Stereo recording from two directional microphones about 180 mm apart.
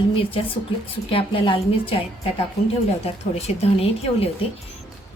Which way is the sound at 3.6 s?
35° left (ahead or behind).